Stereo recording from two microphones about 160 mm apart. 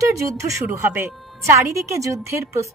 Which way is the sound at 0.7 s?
15° right (ahead or behind).